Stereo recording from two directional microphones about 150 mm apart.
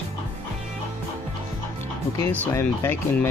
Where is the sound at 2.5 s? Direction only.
15° left (ahead or behind).